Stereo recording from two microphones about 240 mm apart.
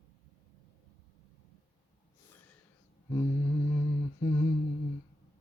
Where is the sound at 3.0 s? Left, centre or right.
Centre.